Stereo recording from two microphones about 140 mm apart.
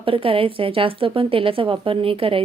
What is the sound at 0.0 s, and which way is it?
A woman's voice, 40° right (ahead or behind).